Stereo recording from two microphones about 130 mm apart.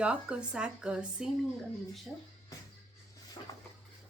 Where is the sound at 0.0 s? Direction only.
10° right (ahead or behind).